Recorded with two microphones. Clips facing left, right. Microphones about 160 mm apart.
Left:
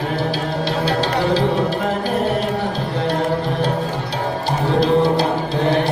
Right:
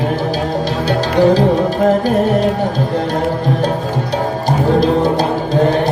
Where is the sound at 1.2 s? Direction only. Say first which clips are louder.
Right 10 dB; 45° right (ahead or behind).